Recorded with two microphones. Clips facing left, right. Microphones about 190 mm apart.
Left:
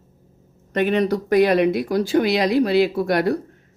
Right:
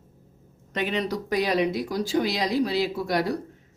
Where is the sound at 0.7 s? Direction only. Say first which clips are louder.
Left 8 dB; 55° left (ahead or behind).